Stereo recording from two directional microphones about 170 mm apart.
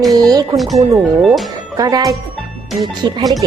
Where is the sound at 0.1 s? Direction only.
20° right (ahead or behind).